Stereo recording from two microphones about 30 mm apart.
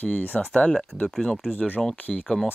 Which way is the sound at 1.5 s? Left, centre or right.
Left.